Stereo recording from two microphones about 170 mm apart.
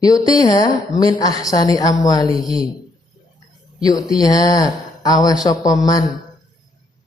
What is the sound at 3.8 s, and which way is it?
Speech, 20° left (ahead or behind).